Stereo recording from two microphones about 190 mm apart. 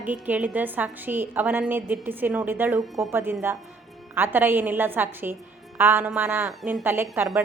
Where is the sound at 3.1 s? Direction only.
10° right (ahead or behind).